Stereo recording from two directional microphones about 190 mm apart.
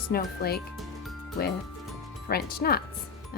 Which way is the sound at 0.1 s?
55° left (ahead or behind).